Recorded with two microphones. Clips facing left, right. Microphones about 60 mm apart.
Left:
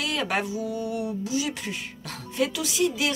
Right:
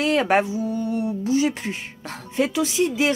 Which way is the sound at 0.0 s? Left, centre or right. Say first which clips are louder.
Right 8 dB; right.